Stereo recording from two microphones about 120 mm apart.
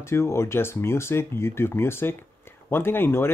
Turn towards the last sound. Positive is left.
turn(degrees=20)  # may be behind; listen again after turning